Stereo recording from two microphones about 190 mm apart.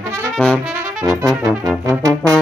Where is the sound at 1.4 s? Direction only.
20° right (ahead or behind).